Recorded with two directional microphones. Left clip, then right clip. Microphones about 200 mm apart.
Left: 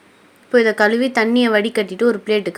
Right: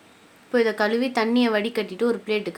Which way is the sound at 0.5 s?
20° left (ahead or behind).